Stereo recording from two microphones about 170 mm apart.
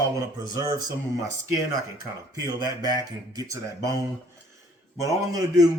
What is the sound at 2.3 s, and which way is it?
Speech, 25° right (ahead or behind).